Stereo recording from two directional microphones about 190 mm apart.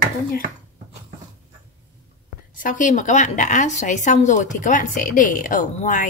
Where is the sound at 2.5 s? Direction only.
45° left (ahead or behind).